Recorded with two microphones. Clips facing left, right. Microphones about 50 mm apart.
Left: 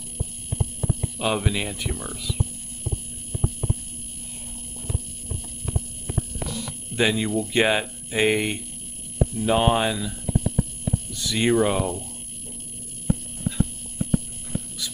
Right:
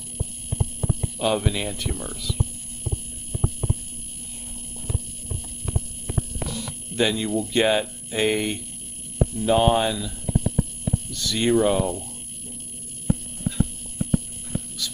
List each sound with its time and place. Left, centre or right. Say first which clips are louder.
1.1 s speech: right 2 dB; centre
7.0 s speech: even; centre